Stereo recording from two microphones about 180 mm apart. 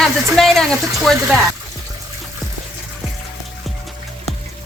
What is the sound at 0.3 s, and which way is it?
Speech, centre (ahead or behind).